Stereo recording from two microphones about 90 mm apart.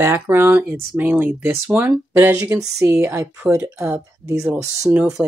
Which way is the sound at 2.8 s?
25° right (ahead or behind).